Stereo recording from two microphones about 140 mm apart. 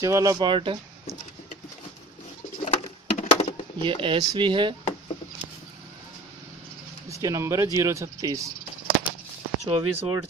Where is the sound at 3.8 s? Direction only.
40° right (ahead or behind).